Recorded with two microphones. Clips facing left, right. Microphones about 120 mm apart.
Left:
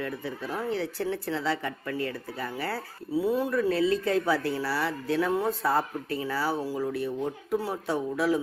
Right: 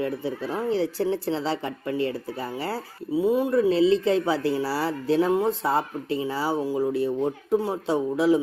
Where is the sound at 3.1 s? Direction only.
15° right (ahead or behind).